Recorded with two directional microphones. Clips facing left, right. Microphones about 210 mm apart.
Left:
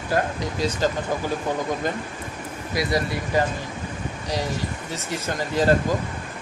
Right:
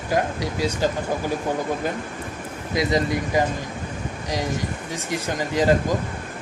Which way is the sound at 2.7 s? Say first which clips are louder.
Right 3 dB; 20° right (ahead or behind).